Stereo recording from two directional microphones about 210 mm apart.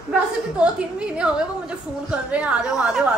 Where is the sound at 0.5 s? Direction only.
5° right (ahead or behind).